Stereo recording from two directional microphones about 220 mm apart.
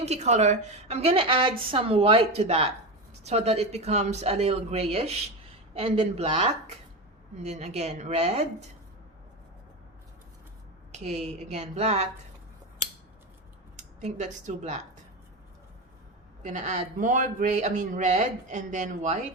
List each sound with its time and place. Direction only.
0.0 s a woman's voice: 30° right (ahead or behind)
10.9 s a man's voice: 30° right (ahead or behind)
13.7 s speech: 30° right (ahead or behind)
16.4 s a man's voice: 35° right (ahead or behind)